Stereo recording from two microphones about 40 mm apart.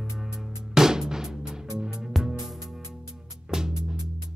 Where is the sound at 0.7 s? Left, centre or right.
Centre.